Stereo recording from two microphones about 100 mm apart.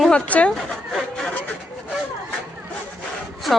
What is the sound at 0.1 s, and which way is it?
Speech, 10° left (ahead or behind).